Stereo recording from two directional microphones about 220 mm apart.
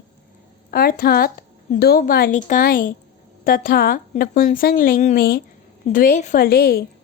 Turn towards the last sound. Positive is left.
turn(degrees=45)  # may be behind; listen again after turning